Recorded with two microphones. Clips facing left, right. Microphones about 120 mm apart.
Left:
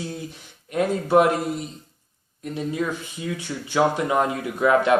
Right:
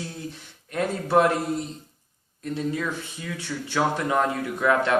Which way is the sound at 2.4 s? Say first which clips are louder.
Left 1 dB; 15° left (ahead or behind).